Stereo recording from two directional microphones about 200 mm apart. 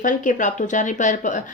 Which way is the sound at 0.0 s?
40° left (ahead or behind).